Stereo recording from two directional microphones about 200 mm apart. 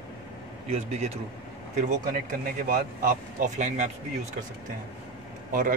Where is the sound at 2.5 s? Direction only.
40° right (ahead or behind).